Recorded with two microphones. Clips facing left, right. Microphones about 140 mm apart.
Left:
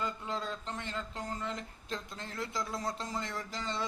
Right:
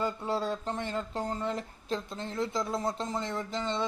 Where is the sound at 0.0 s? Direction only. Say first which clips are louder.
Right 6 dB; 35° right (ahead or behind).